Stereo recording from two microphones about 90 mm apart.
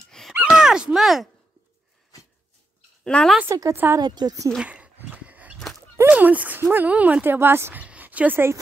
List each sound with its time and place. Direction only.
0.3 s a sound: 10° right (ahead or behind)
3.0 s a woman's voice: 10° left (ahead or behind)
3.7 s speech: 25° right (ahead or behind)
4.0 s speech: 50° right (ahead or behind)
4.6 s dog: 15° right (ahead or behind)
6.0 s speech: 15° right (ahead or behind)
7.8 s a sound: 15° right (ahead or behind)